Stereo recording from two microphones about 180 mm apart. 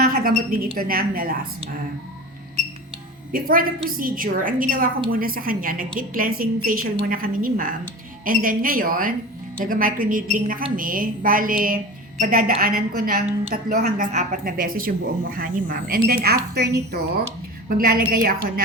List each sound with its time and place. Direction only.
0.0 s a woman's voice: 55° right (ahead or behind)
3.3 s speech: 55° right (ahead or behind)